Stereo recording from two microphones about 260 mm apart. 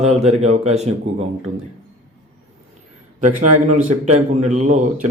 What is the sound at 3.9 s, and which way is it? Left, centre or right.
Speech, right.